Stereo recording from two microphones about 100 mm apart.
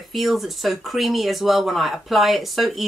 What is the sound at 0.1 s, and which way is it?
Speech, centre (ahead or behind).